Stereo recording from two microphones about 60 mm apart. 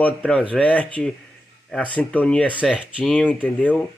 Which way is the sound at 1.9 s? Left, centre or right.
Left.